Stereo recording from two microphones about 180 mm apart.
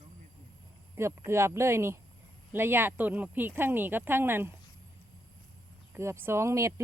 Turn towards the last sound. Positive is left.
turn(degrees=-15)  # may be behind; listen again after turning